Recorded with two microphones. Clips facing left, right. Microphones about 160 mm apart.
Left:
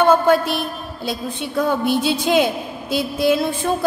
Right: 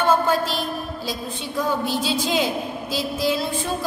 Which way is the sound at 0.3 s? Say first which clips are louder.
Left 5 dB; 60° left (ahead or behind).